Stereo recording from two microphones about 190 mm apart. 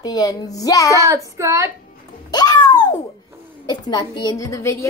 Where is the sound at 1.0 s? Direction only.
15° right (ahead or behind).